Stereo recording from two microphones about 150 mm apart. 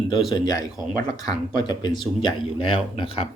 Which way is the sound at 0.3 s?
25° left (ahead or behind).